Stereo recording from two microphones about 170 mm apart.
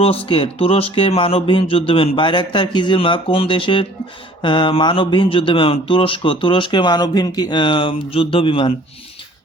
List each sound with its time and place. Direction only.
0.0 s speech: 35° left (ahead or behind)